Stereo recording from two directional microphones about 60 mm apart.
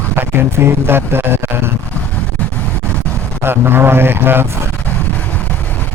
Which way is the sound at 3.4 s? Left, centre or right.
Right.